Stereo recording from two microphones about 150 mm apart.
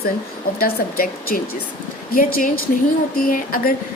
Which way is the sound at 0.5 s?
80° left.